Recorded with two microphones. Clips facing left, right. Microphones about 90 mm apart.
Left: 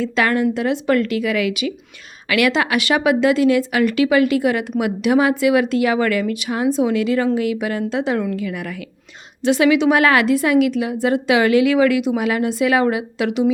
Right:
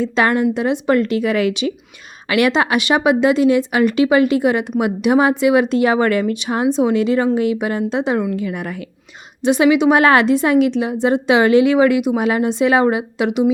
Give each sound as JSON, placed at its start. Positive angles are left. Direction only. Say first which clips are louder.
{"t": 0.0, "sound": "a woman's voice", "louder": "right 2 dB", "side_deg": -20}